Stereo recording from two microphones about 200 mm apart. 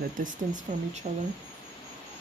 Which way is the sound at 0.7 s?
40° right (ahead or behind).